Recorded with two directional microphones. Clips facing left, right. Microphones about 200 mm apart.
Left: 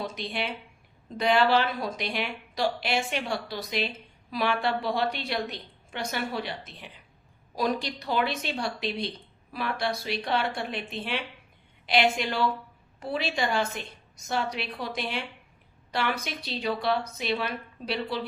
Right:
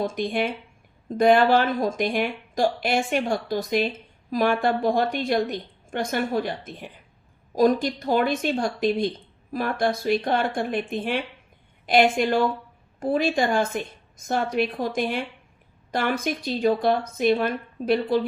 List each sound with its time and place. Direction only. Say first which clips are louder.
0.0 s speech: right 8 dB; 50° right (ahead or behind)